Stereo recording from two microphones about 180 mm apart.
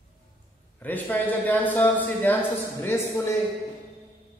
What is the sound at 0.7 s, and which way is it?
A man's voice, 10° left (ahead or behind).